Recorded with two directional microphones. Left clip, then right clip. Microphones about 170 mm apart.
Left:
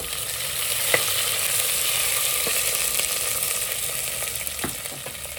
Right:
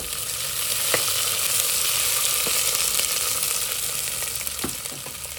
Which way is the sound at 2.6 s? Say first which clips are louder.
Right 1 dB; centre (ahead or behind).